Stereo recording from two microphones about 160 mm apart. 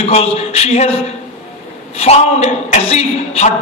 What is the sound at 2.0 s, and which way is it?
A man's voice, 40° left (ahead or behind).